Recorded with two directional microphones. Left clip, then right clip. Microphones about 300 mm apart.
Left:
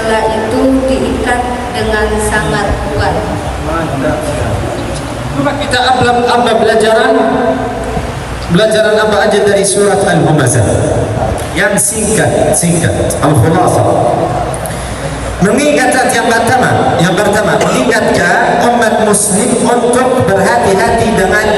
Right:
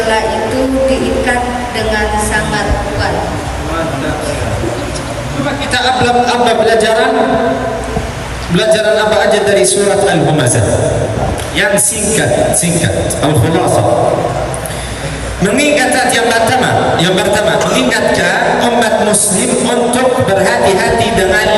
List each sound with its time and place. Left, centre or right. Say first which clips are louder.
1.9 s a sound: left 2 dB; centre
5.7 s a man's voice: left 1 dB; centre
8.5 s a man's voice: left 2 dB; centre
15.4 s a man's voice: left 1 dB; centre
20.4 s a man's voice: left 1 dB; centre